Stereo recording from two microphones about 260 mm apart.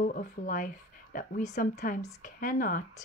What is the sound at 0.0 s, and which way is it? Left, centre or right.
Speech, left.